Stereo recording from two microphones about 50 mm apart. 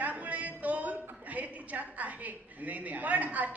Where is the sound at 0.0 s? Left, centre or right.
Right.